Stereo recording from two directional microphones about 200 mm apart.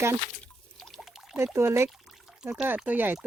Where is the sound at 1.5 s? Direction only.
10° right (ahead or behind).